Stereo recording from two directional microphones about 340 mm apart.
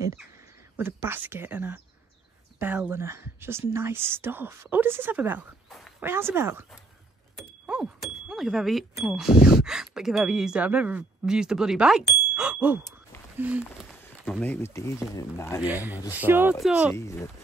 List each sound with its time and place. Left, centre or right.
0.7 s speech: centre
7.6 s a sound: centre
9.3 s speech: left
9.7 s speech: centre
15.6 s speech: centre
16.9 s speech: centre